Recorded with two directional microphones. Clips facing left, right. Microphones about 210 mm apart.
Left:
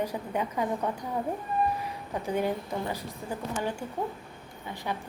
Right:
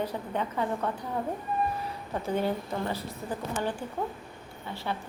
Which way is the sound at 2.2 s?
15° left (ahead or behind).